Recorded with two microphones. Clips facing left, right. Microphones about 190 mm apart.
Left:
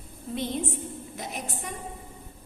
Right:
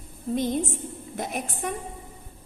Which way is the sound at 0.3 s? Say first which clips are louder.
Right 4 dB; 45° right (ahead or behind).